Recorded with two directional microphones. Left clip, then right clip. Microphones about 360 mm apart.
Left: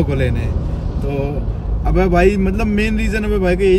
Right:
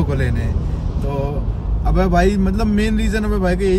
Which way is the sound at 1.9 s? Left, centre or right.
Centre.